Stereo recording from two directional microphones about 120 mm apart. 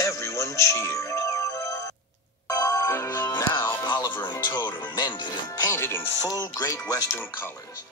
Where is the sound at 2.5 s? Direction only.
30° left (ahead or behind).